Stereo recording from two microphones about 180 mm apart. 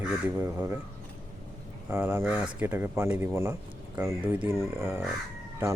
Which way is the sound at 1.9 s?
10° right (ahead or behind).